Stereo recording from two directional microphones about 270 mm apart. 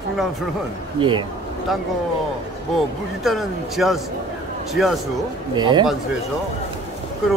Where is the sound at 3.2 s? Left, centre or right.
Centre.